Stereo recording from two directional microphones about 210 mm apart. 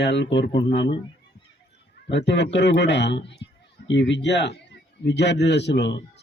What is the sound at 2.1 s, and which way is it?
A man's voice, 55° left (ahead or behind).